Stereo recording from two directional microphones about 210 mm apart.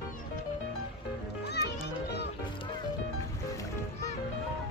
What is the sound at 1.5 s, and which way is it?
Music, 50° left (ahead or behind).